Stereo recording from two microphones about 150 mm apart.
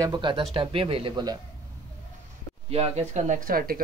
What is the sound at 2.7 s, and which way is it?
Speech, 45° right (ahead or behind).